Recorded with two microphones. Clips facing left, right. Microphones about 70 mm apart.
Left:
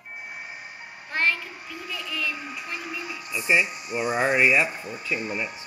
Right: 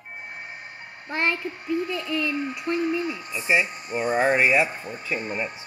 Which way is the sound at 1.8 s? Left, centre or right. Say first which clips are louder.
Right 3 dB; centre.